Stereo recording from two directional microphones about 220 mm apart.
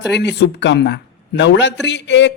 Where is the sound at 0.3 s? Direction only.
50° left (ahead or behind).